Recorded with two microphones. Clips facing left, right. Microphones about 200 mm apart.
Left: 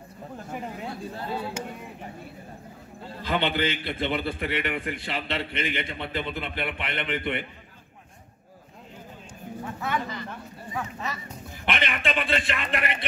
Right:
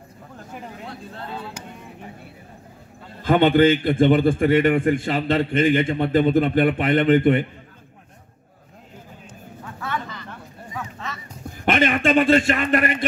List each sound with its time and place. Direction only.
3.3 s a man's voice: 50° right (ahead or behind)
11.6 s a man's voice: 45° right (ahead or behind)